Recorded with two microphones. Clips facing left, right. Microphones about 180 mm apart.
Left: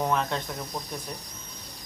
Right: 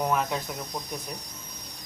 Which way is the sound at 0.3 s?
Centre (ahead or behind).